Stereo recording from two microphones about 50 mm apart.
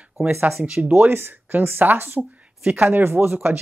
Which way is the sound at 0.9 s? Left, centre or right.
Right.